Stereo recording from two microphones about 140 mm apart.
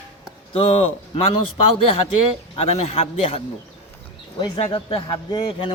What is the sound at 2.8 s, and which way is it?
Speech, 50° left (ahead or behind).